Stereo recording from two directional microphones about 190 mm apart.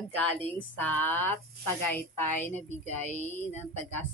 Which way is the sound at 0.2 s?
10° left (ahead or behind).